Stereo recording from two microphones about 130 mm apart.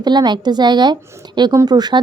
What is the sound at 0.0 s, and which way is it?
A woman's voice, 35° right (ahead or behind).